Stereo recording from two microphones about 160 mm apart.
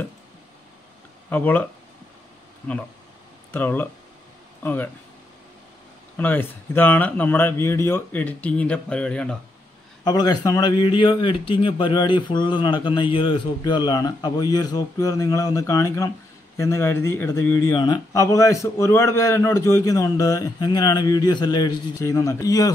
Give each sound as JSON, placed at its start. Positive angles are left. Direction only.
{"t": 1.3, "sound": "speech", "side_deg": 10}
{"t": 3.5, "sound": "speech", "side_deg": 10}
{"t": 6.1, "sound": "speech", "side_deg": 10}
{"t": 10.0, "sound": "speech", "side_deg": 25}